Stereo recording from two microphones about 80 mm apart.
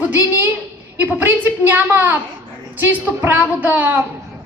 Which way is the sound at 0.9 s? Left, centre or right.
Right.